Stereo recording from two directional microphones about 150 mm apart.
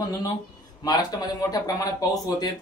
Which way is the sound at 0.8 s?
25° left (ahead or behind).